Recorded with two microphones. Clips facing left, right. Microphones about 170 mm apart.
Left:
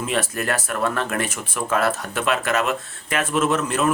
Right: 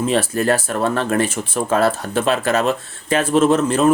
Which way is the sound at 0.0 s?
30° right (ahead or behind).